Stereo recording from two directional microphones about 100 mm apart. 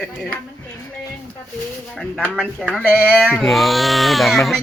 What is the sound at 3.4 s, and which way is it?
Speech, centre (ahead or behind).